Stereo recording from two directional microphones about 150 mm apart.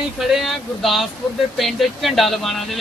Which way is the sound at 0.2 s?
Centre (ahead or behind).